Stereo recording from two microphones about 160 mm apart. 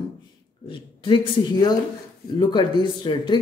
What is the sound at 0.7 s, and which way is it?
Speech, 30° left (ahead or behind).